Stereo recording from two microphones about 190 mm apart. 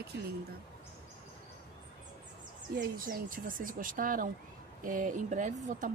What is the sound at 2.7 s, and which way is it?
Speech, 50° right (ahead or behind).